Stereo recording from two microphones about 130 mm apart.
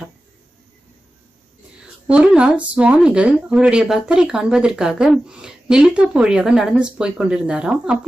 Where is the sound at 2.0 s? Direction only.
10° right (ahead or behind).